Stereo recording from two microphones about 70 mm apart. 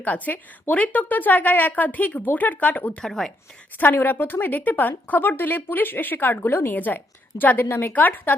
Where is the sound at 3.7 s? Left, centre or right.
Left.